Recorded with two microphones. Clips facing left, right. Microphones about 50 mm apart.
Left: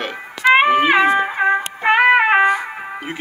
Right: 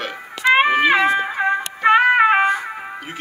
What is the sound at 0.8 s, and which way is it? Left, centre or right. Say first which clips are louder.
Music: left 2 dB; left.